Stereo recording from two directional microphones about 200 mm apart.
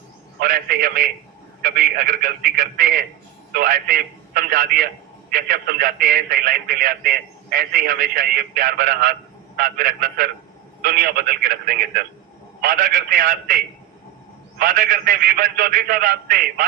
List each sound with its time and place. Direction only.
0.3 s a man's voice: 50° right (ahead or behind)
14.6 s speech: 45° right (ahead or behind)